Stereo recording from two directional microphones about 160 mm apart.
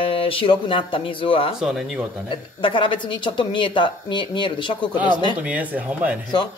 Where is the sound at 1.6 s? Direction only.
5° right (ahead or behind).